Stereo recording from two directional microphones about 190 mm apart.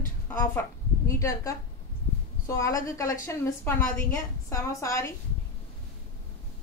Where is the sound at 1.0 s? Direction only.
15° left (ahead or behind).